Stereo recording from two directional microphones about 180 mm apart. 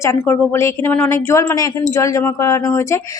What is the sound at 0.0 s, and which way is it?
A woman's voice, 15° left (ahead or behind).